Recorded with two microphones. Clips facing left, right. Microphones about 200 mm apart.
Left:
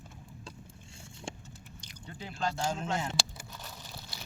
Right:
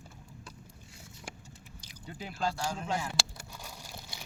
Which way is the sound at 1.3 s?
25° left (ahead or behind).